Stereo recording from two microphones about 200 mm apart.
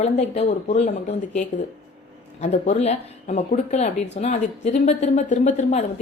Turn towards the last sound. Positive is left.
turn(degrees=35)  # may be behind; listen again after turning